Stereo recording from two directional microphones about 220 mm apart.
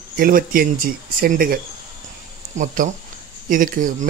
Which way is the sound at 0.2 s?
40° right (ahead or behind).